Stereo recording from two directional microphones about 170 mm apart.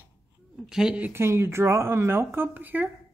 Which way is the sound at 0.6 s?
5° right (ahead or behind).